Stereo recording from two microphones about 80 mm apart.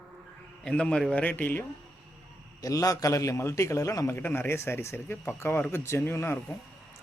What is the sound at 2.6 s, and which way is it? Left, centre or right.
A man's voice, left.